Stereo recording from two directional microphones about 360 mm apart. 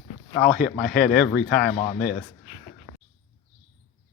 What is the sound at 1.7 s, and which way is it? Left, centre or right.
Speech, centre.